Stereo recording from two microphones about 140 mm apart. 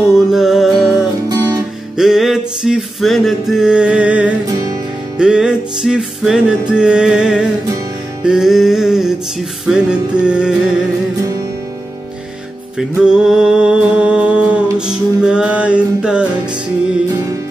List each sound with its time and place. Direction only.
0.3 s music: centre (ahead or behind)
1.3 s guitar: 30° right (ahead or behind)
2.0 s music: 5° right (ahead or behind)
12.7 s music: 5° right (ahead or behind)